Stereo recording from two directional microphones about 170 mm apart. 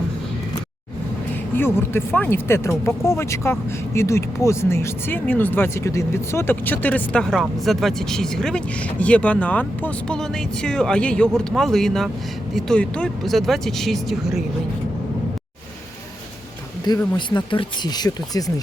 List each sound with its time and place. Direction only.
1.5 s speech: 15° left (ahead or behind)
17.2 s speech: 25° left (ahead or behind)